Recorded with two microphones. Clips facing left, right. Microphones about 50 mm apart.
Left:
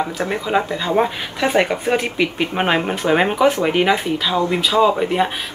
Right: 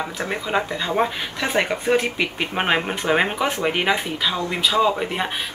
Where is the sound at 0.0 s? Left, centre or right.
Centre.